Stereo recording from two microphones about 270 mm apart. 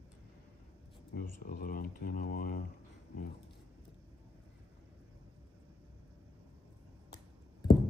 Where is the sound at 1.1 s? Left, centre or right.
Left.